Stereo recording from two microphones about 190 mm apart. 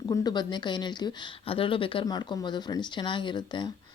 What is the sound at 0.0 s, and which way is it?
Speech, 20° left (ahead or behind).